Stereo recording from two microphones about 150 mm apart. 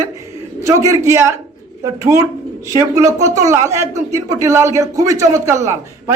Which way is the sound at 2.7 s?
20° right (ahead or behind).